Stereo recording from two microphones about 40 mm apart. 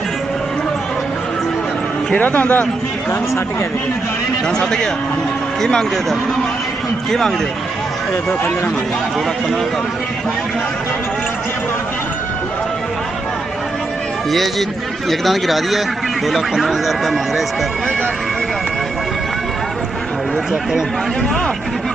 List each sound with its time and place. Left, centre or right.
2.1 s a man's voice: left
4.5 s a man's voice: centre
7.1 s a man's voice: centre
15.0 s speech: centre